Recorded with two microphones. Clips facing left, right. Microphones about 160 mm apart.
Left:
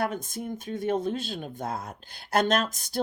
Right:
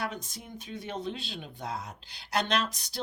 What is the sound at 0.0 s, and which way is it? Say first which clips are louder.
Speech: left 7 dB; 50° left (ahead or behind).